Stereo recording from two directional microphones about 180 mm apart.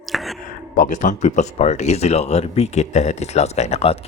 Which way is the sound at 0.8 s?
45° left (ahead or behind).